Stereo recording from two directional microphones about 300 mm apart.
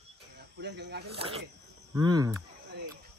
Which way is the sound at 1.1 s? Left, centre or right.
Centre.